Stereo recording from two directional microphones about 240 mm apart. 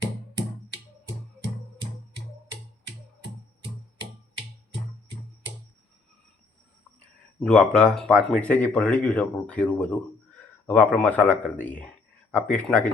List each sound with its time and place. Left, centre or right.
7.4 s speech: centre